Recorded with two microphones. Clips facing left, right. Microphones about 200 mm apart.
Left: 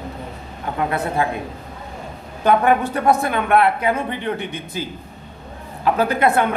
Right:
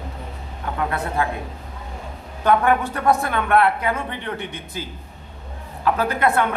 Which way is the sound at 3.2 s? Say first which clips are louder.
Left 2 dB; 15° left (ahead or behind).